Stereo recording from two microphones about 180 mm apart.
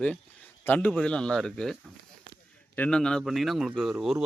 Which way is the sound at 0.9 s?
5° left (ahead or behind).